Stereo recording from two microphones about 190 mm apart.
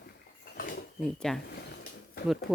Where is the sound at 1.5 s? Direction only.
60° left (ahead or behind).